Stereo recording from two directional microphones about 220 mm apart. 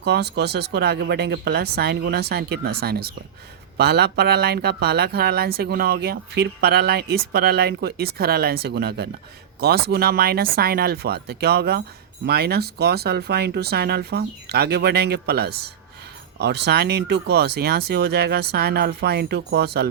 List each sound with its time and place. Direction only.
0.0 s speech: 50° right (ahead or behind)